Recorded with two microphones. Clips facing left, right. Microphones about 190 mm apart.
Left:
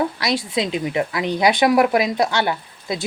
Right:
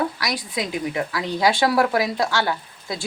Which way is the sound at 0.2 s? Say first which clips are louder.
Left 5 dB; 25° left (ahead or behind).